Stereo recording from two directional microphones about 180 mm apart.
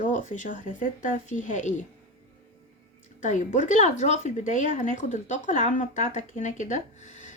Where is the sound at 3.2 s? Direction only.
45° left (ahead or behind).